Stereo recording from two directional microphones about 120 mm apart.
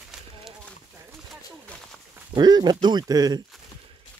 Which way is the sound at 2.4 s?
35° right (ahead or behind).